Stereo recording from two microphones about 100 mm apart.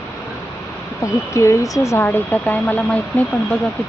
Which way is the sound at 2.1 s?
15° left (ahead or behind).